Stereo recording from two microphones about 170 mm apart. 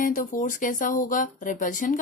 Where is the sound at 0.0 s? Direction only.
50° left (ahead or behind).